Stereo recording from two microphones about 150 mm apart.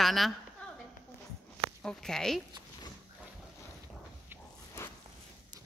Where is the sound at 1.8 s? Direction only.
5° left (ahead or behind).